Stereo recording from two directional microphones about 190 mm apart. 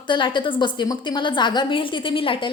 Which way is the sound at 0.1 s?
25° left (ahead or behind).